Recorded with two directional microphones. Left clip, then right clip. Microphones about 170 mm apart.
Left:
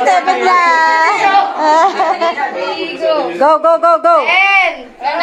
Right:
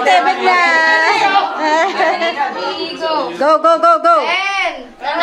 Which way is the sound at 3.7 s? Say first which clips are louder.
Left 1 dB; 5° left (ahead or behind).